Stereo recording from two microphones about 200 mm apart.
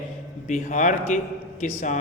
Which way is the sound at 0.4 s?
35° left (ahead or behind).